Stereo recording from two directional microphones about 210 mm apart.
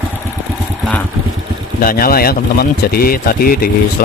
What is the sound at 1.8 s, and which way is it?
Speech, 45° left (ahead or behind).